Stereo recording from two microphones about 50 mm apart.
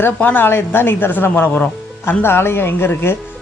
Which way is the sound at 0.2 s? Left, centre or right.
Left.